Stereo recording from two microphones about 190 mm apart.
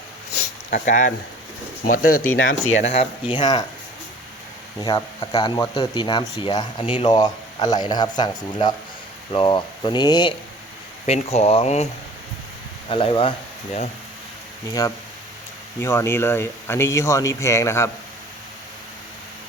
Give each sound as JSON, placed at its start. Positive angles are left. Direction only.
{"t": 0.9, "sound": "speech", "side_deg": 40}
{"t": 2.2, "sound": "speech", "side_deg": 90}
{"t": 2.8, "sound": "speech", "side_deg": 35}
{"t": 4.8, "sound": "speech", "side_deg": 20}
{"t": 11.0, "sound": "speech", "side_deg": 35}
{"t": 12.9, "sound": "speech", "side_deg": 30}
{"t": 14.7, "sound": "speech", "side_deg": 20}